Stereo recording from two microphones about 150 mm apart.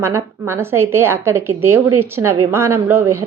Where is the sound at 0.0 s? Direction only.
15° right (ahead or behind).